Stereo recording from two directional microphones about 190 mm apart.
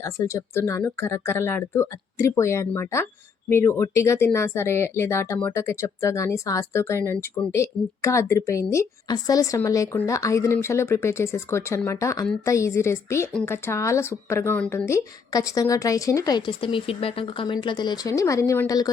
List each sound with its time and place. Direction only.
0.0 s speech: 15° left (ahead or behind)